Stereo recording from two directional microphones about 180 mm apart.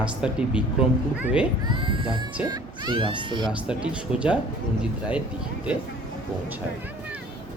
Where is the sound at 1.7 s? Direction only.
25° right (ahead or behind).